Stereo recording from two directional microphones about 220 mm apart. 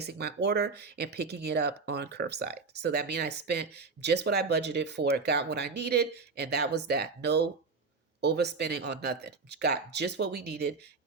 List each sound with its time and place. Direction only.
0.0 s speech: 45° right (ahead or behind)